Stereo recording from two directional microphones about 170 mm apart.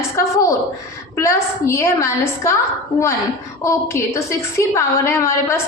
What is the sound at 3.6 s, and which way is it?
A woman's voice, 15° left (ahead or behind).